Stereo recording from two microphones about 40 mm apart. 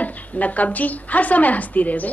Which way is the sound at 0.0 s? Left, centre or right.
Left.